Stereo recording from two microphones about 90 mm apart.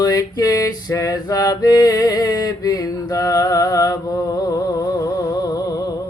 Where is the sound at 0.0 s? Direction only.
45° left (ahead or behind).